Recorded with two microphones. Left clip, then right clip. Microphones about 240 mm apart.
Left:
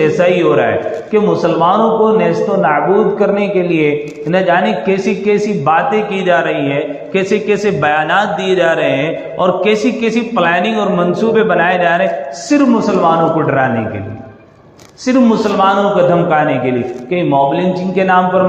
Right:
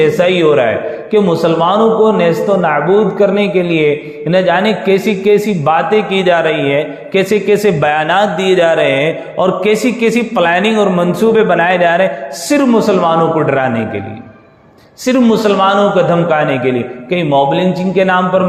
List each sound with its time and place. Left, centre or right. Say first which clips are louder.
0.0 s a man's voice: right 1 dB; right
15.0 s a man's voice: right 1 dB; right